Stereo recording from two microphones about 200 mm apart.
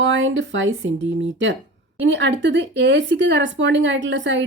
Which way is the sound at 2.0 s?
65° right (ahead or behind).